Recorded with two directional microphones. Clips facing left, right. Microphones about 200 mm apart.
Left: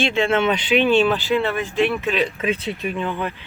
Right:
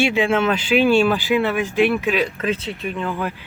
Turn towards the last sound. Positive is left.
turn(degrees=0)  # may be behind; listen again after turning